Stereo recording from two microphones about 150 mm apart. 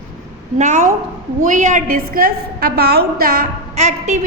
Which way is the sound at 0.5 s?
55° right (ahead or behind).